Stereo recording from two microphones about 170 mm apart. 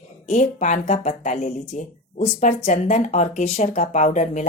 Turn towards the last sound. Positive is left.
turn(degrees=45)  # may be behind; listen again after turning